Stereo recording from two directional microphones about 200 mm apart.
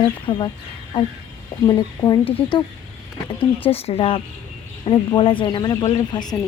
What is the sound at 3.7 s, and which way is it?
Speech, 30° left (ahead or behind).